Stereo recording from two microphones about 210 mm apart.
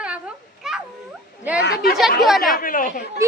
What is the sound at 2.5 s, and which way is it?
Speech, 40° left (ahead or behind).